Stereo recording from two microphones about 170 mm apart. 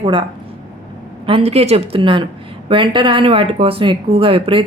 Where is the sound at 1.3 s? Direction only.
35° right (ahead or behind).